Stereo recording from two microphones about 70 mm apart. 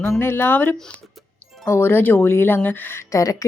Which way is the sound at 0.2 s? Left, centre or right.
Left.